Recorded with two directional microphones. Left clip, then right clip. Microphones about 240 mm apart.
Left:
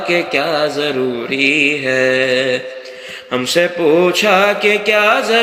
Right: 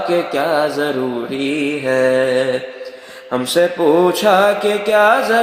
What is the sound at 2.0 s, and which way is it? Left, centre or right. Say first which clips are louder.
Music: even; centre.